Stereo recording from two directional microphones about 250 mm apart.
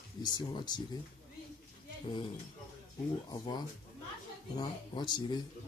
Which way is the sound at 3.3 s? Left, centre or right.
Centre.